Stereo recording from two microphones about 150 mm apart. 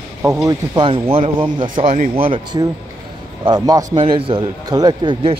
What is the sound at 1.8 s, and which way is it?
Speech, 50° right (ahead or behind).